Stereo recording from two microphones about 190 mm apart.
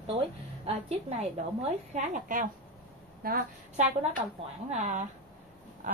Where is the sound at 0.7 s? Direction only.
35° right (ahead or behind).